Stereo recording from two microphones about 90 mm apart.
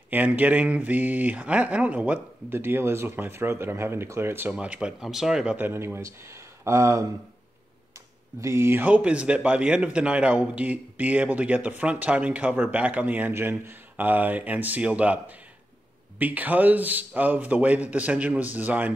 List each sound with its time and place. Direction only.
0.1 s speech: 15° right (ahead or behind)
4.5 s speech: 15° right (ahead or behind)
5.6 s speech: 25° right (ahead or behind)
8.4 s speech: 30° right (ahead or behind)